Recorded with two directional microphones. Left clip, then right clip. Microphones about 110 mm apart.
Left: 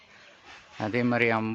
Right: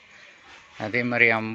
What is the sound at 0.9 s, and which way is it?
Speech, 30° left (ahead or behind).